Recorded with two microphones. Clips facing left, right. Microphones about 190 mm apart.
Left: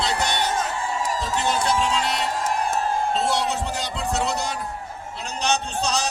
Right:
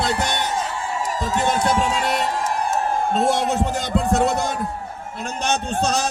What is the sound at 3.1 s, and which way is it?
A man's voice, 50° right (ahead or behind).